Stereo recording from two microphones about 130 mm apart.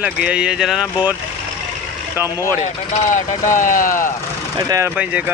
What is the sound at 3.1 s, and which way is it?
Speech, 80° left.